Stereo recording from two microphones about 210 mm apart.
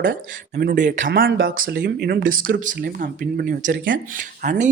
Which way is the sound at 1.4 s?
60° right (ahead or behind).